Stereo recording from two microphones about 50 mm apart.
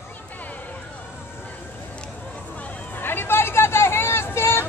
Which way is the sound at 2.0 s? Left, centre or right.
Left.